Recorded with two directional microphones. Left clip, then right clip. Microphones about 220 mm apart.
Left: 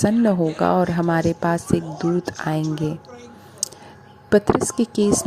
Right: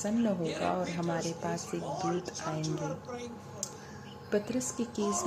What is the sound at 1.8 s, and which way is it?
A woman's voice, centre (ahead or behind).